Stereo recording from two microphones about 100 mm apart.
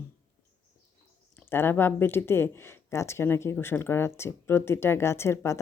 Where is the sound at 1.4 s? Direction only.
25° left (ahead or behind).